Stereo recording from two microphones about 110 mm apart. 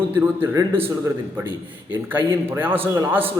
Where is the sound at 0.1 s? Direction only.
20° right (ahead or behind).